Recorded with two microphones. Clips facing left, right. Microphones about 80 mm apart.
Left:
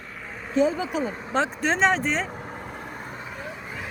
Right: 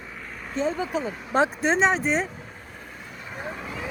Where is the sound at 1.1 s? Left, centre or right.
Left.